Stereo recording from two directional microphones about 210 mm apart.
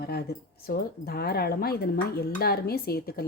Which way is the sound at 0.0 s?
50° left (ahead or behind).